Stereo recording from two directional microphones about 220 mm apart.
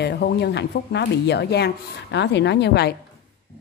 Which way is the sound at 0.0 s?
50° left (ahead or behind).